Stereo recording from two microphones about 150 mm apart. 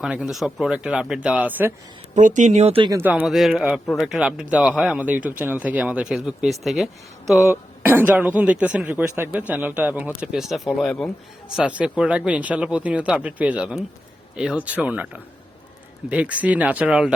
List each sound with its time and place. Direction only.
0.0 s a man's voice: 5° right (ahead or behind)
2.1 s speech: 55° right (ahead or behind)
3.0 s a man's voice: 10° right (ahead or behind)
7.4 s speech: 15° right (ahead or behind)